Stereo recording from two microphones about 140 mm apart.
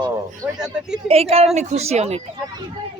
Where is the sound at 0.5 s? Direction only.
5° right (ahead or behind).